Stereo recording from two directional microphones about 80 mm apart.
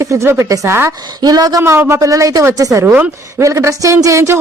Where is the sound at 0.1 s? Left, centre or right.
Right.